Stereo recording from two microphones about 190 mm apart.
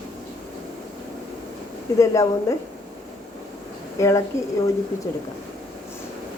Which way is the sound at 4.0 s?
15° left (ahead or behind).